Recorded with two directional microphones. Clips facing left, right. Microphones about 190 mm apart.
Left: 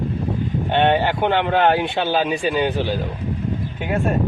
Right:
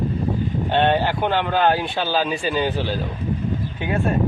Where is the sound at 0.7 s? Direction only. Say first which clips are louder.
Left 1 dB; 20° left (ahead or behind).